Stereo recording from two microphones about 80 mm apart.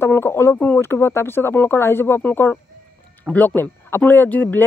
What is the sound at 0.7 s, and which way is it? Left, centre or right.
Speech, left.